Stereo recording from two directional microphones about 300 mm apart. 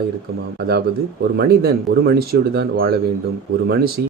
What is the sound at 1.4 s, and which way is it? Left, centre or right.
Speech, right.